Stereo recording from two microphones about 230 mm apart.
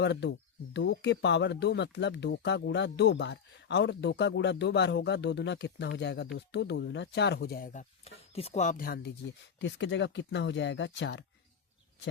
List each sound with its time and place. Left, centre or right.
0.0 s speech: left
9.6 s speech: left